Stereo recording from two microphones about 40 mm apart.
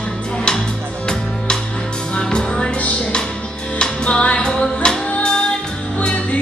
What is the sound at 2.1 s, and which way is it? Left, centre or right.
Music, left.